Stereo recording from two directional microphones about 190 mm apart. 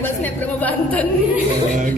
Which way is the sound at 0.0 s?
10° left (ahead or behind).